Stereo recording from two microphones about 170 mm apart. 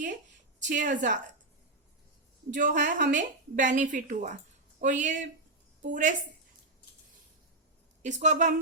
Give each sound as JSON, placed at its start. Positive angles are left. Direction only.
{"t": 0.7, "sound": "a woman's voice", "side_deg": -50}
{"t": 2.5, "sound": "a woman's voice", "side_deg": -50}
{"t": 8.0, "sound": "a woman's voice", "side_deg": -45}